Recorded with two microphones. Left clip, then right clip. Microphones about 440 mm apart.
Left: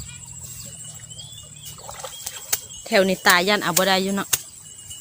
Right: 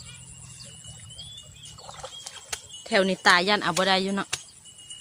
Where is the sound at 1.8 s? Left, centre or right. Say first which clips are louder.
Left 5 dB; right.